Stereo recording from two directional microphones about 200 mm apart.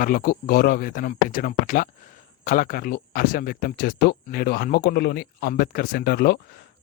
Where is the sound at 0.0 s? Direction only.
45° left (ahead or behind).